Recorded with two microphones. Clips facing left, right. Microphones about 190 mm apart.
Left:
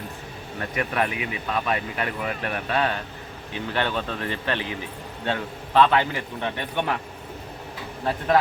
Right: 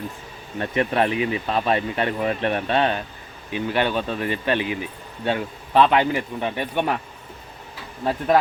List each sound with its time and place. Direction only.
0.6 s speech: 25° right (ahead or behind)
3.5 s a man's voice: 15° right (ahead or behind)